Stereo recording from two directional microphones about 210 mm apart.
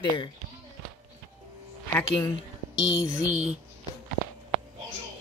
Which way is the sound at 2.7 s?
20° left (ahead or behind).